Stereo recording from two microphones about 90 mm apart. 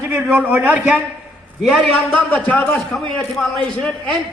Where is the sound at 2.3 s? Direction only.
15° left (ahead or behind).